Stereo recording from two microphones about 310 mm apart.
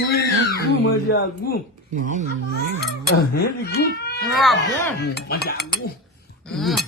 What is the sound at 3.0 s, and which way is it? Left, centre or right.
Speech, left.